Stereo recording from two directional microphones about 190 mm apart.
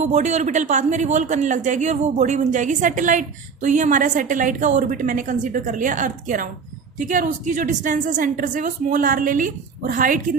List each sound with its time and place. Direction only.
0.0 s a man's voice: 35° right (ahead or behind)